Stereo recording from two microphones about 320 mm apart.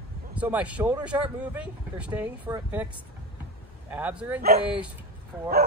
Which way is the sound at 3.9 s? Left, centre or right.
Centre.